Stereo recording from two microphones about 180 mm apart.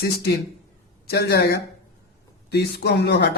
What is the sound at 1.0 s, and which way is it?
Speech, 60° left (ahead or behind).